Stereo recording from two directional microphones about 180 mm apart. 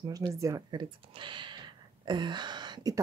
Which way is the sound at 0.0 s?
20° right (ahead or behind).